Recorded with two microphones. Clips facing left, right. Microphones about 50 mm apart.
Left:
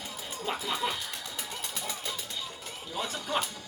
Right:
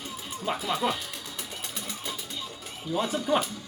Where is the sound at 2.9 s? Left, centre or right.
Centre.